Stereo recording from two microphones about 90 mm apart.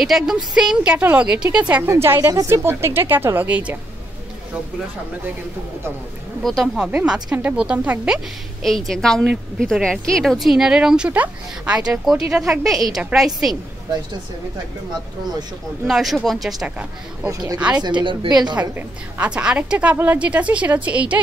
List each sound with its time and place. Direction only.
0.0 s speech: 5° right (ahead or behind)
0.9 s a woman's voice: 15° right (ahead or behind)
1.8 s a woman's voice: 25° right (ahead or behind)
6.4 s speech: centre (ahead or behind)
6.9 s a woman's voice: 10° right (ahead or behind)
8.6 s speech: 5° left (ahead or behind)
15.9 s speech: 5° right (ahead or behind)
17.7 s a woman's voice: 55° right (ahead or behind)
18.6 s a woman's voice: 15° right (ahead or behind)